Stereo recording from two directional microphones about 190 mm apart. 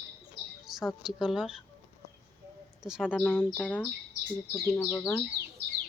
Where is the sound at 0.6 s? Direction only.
Centre (ahead or behind).